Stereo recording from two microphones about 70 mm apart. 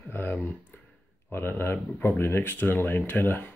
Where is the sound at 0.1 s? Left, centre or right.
Left.